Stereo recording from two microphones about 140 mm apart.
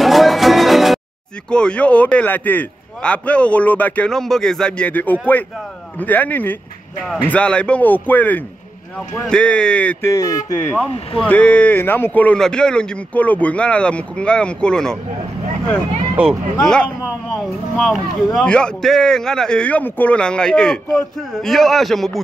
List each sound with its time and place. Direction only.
0.0 s music: centre (ahead or behind)
1.5 s a man's voice: 5° left (ahead or behind)
10.1 s speech: 25° left (ahead or behind)
10.7 s speech: 5° right (ahead or behind)
11.2 s a man's voice: 10° left (ahead or behind)
16.2 s speech: 10° right (ahead or behind)
16.6 s speech: 5° left (ahead or behind)